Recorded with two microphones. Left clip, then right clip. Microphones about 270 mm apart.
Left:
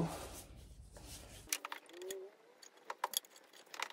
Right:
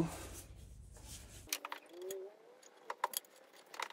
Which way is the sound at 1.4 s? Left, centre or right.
Centre.